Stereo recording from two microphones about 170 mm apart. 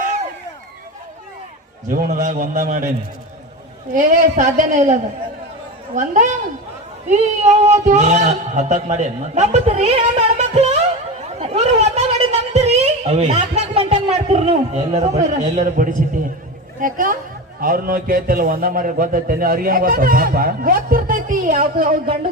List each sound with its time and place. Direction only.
1.9 s a man's voice: 50° right (ahead or behind)
3.9 s a man's voice: 50° right (ahead or behind)
11.3 s a sound: 35° right (ahead or behind); by 16.0 s 50° right (ahead or behind)
16.8 s a man's voice: 55° right (ahead or behind)